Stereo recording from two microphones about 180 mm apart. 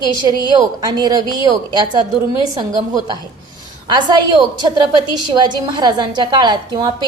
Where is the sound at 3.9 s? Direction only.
25° right (ahead or behind).